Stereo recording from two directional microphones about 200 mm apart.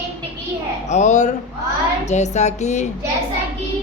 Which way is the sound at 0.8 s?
35° left (ahead or behind).